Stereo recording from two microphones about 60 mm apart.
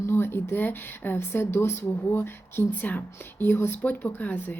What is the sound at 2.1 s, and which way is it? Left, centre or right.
Speech, left.